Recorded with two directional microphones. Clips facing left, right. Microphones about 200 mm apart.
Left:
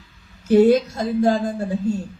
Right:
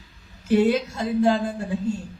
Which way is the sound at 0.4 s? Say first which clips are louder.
Left 5 dB; 40° left (ahead or behind).